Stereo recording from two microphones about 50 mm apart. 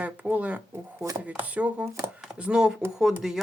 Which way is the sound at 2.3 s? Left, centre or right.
Centre.